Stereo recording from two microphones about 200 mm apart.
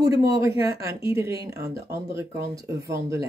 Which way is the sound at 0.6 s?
15° right (ahead or behind).